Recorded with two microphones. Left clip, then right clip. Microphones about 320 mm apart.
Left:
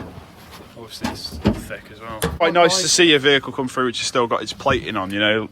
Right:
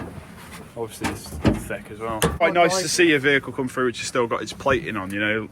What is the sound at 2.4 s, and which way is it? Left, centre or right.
Speech, centre.